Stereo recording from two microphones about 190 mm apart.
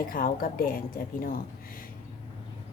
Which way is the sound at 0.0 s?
50° left (ahead or behind).